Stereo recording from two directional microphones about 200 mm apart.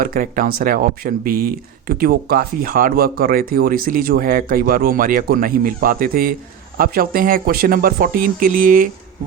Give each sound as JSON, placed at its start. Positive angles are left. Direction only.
{"t": 0.0, "sound": "speech", "side_deg": -45}